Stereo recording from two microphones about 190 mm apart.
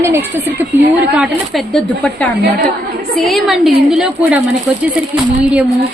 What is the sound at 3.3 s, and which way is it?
A woman's voice, centre (ahead or behind).